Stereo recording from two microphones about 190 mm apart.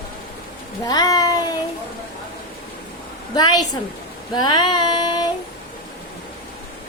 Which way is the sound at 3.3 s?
20° left (ahead or behind).